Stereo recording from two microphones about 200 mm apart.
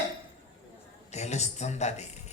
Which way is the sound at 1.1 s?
35° left (ahead or behind).